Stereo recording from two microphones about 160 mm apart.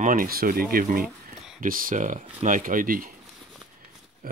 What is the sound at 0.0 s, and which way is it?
Speech, 60° right (ahead or behind).